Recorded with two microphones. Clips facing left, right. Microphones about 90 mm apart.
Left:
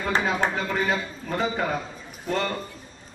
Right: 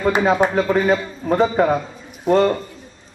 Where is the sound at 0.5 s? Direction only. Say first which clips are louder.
Right 9 dB; 40° right (ahead or behind).